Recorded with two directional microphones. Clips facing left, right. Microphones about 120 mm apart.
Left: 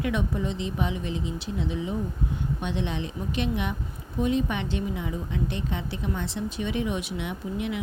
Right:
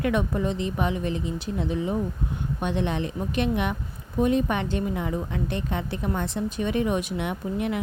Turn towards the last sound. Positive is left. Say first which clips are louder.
# right 3 dB
turn(degrees=-50)  # may be behind; listen again after turning